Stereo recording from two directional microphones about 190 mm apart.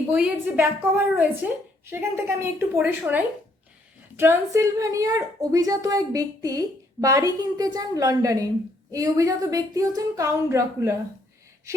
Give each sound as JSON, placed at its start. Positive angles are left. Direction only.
{"t": 0.1, "sound": "a woman's voice", "side_deg": -10}